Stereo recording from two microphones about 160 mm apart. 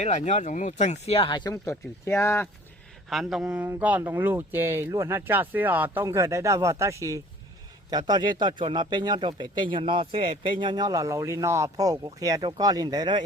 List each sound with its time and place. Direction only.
0.0 s speech: 50° left (ahead or behind); by 1.7 s 25° left (ahead or behind)
1.7 s speech: 15° left (ahead or behind)
3.1 s speech: centre (ahead or behind); by 13.2 s 25° right (ahead or behind)